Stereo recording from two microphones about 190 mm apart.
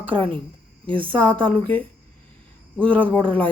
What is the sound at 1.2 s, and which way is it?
Speech, 10° left (ahead or behind).